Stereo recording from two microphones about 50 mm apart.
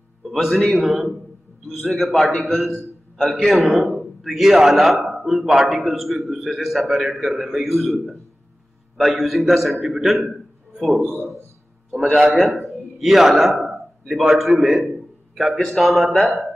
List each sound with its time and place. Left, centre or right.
0.2 s a man's voice: centre
8.9 s a man's voice: centre
10.3 s a sound: centre
11.0 s a man's voice: left
12.2 s a man's voice: centre